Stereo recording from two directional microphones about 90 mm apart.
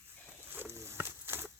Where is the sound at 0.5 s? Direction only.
20° right (ahead or behind).